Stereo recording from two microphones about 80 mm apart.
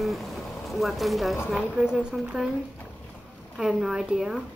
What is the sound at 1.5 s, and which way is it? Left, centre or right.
Speech, centre.